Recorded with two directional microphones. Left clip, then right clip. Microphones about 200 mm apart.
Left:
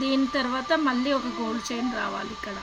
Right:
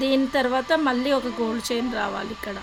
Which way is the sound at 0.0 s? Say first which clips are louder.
Right 4 dB; 60° right (ahead or behind).